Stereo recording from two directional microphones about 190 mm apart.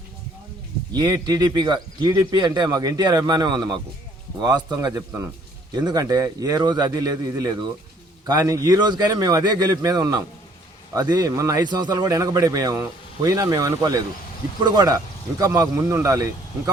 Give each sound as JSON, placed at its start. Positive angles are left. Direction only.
{"t": 0.9, "sound": "speech", "side_deg": -20}